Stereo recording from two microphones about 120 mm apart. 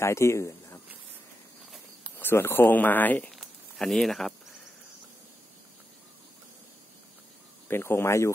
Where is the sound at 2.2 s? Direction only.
20° left (ahead or behind).